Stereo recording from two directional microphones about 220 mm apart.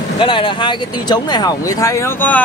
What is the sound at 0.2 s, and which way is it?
Speech, 25° left (ahead or behind).